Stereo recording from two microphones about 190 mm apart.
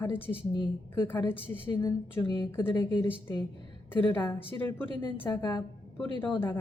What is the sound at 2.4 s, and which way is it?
Speech, 10° left (ahead or behind).